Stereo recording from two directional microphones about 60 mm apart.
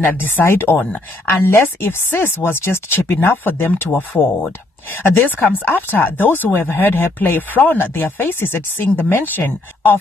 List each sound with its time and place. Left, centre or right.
0.0 s speech: left